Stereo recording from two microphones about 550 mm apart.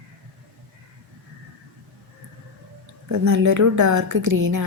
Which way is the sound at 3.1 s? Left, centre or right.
Right.